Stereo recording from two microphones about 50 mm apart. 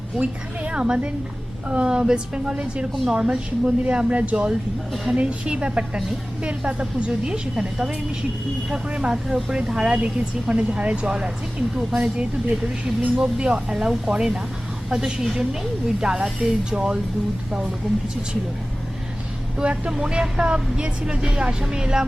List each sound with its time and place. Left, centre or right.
0.2 s speech: centre
9.1 s a woman's voice: centre
15.2 s speech: centre
19.5 s speech: right